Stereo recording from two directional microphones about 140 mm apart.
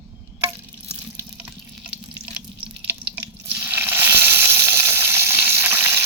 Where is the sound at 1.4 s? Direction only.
10° right (ahead or behind).